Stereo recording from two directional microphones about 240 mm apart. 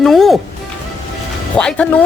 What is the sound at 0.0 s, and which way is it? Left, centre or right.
Speech, centre.